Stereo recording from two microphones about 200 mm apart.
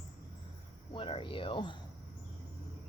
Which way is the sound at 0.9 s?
25° left (ahead or behind).